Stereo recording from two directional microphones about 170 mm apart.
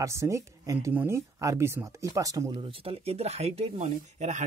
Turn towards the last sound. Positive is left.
turn(degrees=-45)  # may be behind; listen again after turning